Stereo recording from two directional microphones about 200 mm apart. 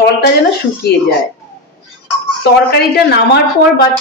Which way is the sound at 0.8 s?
55° left (ahead or behind).